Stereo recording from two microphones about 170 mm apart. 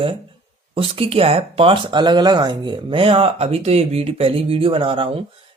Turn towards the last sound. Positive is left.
turn(degrees=-30)  # may be behind; listen again after turning